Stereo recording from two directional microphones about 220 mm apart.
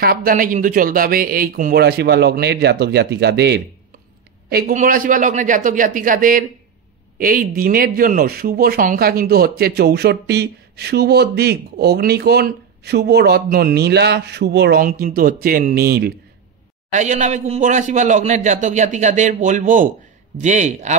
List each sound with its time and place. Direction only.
0.0 s a man's voice: 40° right (ahead or behind)
16.9 s a man's voice: 35° right (ahead or behind)